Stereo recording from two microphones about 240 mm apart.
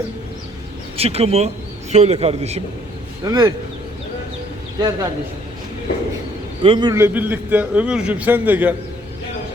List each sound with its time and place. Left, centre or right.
0.9 s a man's voice: right
3.2 s a man's voice: centre
4.8 s a man's voice: centre
6.6 s a man's voice: centre